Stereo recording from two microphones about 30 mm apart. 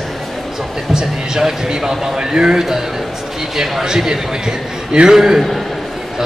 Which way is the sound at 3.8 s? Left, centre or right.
Right.